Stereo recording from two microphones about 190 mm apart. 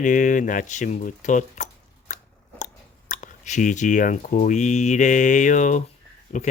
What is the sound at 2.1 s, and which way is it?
Scissors, 40° left (ahead or behind).